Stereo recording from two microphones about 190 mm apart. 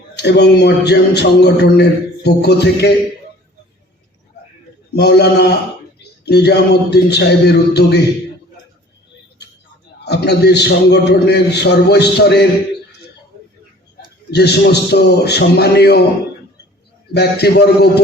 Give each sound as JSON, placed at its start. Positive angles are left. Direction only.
{"t": 0.2, "sound": "a man's voice", "side_deg": 65}
{"t": 4.9, "sound": "a man's voice", "side_deg": 60}
{"t": 10.0, "sound": "a man's voice", "side_deg": 60}
{"t": 14.3, "sound": "a man's voice", "side_deg": 60}
{"t": 17.2, "sound": "a man's voice", "side_deg": 60}